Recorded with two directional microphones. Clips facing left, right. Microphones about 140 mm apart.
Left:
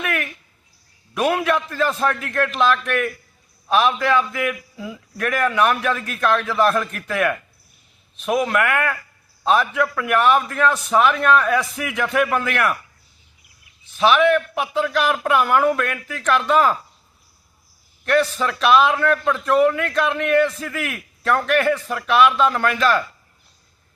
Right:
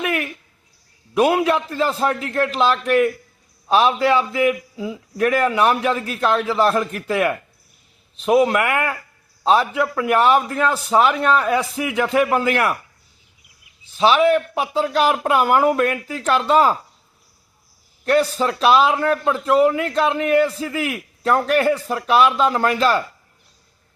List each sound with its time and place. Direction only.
0.0 s a sound: 25° right (ahead or behind)
1.1 s a man's voice: 30° right (ahead or behind)
14.0 s speech: 30° right (ahead or behind)
18.0 s a man's voice: 35° right (ahead or behind)